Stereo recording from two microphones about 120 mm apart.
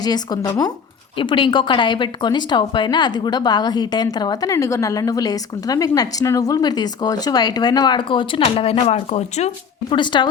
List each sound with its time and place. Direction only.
0.0 s speech: 35° left (ahead or behind)
1.1 s speech: 45° left (ahead or behind); by 9.5 s 65° left (ahead or behind)
9.9 s speech: 40° left (ahead or behind)